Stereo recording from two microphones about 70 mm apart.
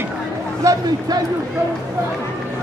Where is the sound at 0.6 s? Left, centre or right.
Right.